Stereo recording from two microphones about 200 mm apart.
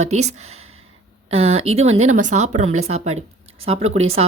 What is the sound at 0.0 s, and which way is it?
Speech, 35° right (ahead or behind).